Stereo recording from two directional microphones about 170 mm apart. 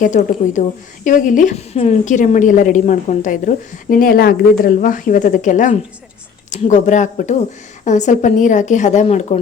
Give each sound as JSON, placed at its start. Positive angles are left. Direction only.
{"t": 0.0, "sound": "a woman's voice", "side_deg": 50}